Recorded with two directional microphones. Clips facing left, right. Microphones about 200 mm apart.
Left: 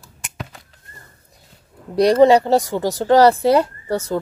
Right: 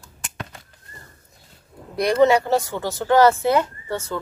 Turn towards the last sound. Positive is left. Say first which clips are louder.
# left 6 dB
turn(degrees=40)  # may be behind; listen again after turning